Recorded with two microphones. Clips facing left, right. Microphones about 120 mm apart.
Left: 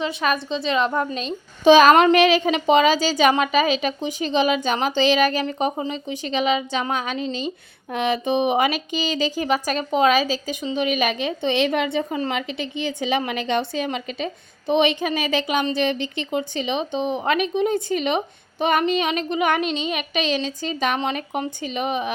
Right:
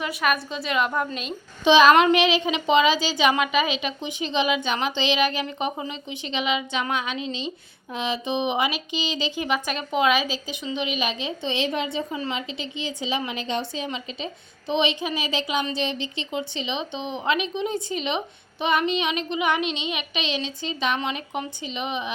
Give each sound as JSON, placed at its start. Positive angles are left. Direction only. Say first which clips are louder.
{"t": 0.0, "sound": "a woman's voice", "louder": "left 2 dB", "side_deg": 25}
{"t": 1.6, "sound": "a woman's voice", "louder": "left 3 dB", "side_deg": 45}
{"t": 7.9, "sound": "a woman's voice", "louder": "left 5 dB", "side_deg": 55}